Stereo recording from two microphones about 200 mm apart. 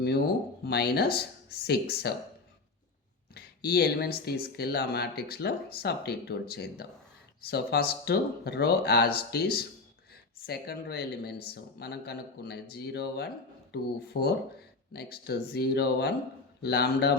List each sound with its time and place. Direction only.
0.6 s speech: 55° left (ahead or behind)
3.3 s speech: 50° left (ahead or behind)